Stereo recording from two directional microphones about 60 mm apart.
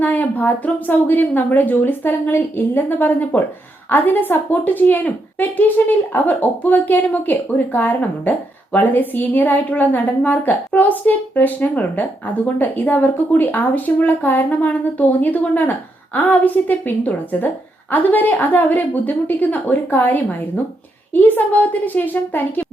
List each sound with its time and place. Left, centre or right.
0.0 s a woman's voice: left